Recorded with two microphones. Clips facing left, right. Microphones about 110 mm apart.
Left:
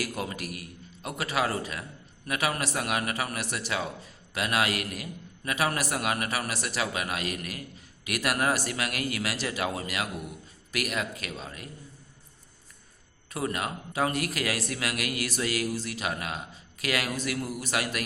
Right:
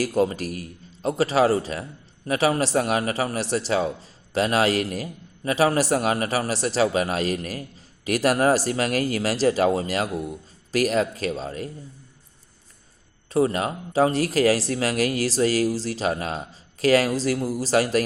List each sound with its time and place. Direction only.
0.0 s a man's voice: 35° right (ahead or behind)
13.3 s a man's voice: 35° right (ahead or behind)